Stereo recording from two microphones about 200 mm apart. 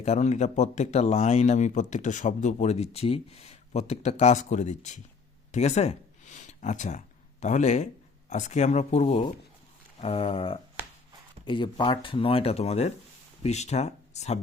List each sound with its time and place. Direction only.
0.0 s speech: 35° left (ahead or behind)